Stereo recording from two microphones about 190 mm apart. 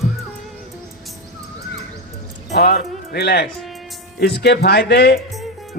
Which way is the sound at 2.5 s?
55° left (ahead or behind).